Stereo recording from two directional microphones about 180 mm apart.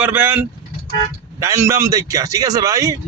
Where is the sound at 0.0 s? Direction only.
10° right (ahead or behind).